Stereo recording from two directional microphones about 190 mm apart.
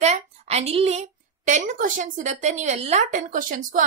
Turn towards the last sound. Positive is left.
turn(degrees=-45)  # may be behind; listen again after turning